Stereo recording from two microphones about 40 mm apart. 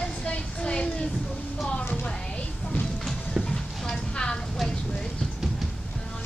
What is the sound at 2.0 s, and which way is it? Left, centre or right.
Music, left.